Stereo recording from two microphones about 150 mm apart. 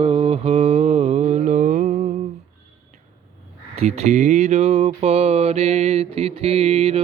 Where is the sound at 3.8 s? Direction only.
45° right (ahead or behind).